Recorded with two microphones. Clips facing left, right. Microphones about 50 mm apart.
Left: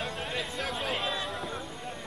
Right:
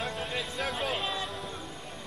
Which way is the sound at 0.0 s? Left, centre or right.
Centre.